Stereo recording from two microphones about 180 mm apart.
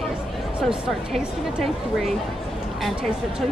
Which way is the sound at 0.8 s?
Centre (ahead or behind).